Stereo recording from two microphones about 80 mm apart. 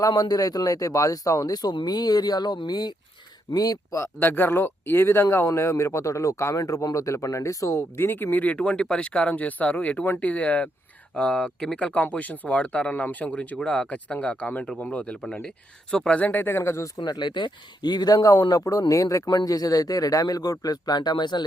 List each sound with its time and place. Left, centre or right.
0.1 s speech: left
3.9 s speech: left
17.0 s speech: left
18.5 s speech: left